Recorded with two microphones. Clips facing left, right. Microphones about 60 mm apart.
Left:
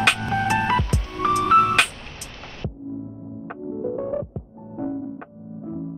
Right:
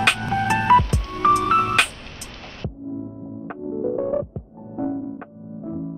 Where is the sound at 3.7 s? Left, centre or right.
Centre.